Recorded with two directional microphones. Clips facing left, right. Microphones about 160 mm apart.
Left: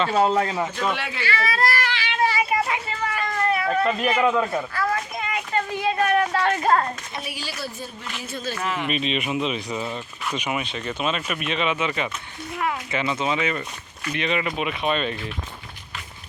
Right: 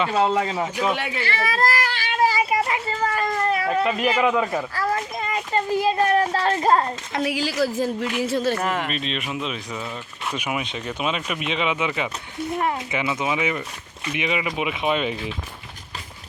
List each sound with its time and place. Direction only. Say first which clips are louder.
0.1 s speech: left 1 dB; centre (ahead or behind)
1.5 s child singing: right 1 dB; 45° right (ahead or behind)
3.0 s a sound: right 3 dB; 40° right (ahead or behind)
3.7 s a man's voice: right 1 dB; 10° right (ahead or behind)
4.7 s a sound: right 1 dB; 35° right (ahead or behind)
7.1 s a man's voice: right 9 dB; 90° right
8.5 s speech: right 3 dB; 50° right (ahead or behind)
8.9 s speech: left 3 dB; 5° left (ahead or behind)
10.3 s a man's voice: even; 10° right (ahead or behind)